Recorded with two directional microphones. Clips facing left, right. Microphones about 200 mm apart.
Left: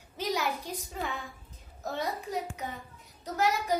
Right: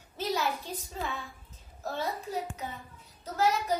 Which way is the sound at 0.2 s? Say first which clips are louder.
Even; 15° left (ahead or behind).